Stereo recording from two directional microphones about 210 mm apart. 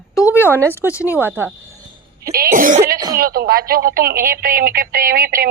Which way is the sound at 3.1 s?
45° right (ahead or behind).